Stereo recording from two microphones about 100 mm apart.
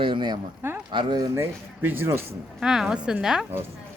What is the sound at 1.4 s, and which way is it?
Speech, 20° right (ahead or behind).